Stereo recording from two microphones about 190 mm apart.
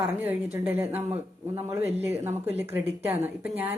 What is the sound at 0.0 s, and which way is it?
Speech, 10° right (ahead or behind).